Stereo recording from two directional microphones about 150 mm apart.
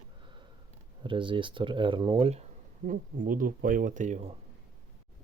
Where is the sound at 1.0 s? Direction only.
35° right (ahead or behind); by 4.4 s 50° right (ahead or behind).